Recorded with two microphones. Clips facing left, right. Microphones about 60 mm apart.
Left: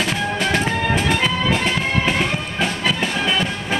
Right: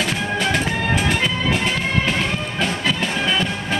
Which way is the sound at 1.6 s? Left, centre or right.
Centre.